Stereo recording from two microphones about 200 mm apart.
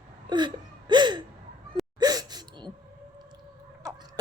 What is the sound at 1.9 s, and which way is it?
Gasp, 20° right (ahead or behind).